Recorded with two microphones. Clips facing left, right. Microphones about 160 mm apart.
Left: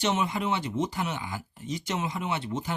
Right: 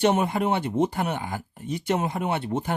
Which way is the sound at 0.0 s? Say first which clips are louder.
Right 6 dB; 55° right (ahead or behind).